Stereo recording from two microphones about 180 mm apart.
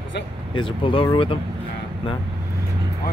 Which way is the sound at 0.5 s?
30° left (ahead or behind).